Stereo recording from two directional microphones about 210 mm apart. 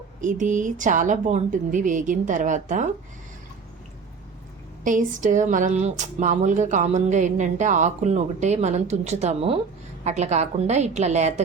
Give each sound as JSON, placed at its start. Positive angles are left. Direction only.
{"t": 0.2, "sound": "speech", "side_deg": -35}
{"t": 4.8, "sound": "speech", "side_deg": -35}